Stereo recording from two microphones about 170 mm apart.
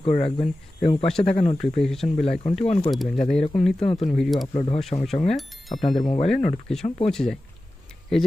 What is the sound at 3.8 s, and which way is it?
Speech, 35° left (ahead or behind).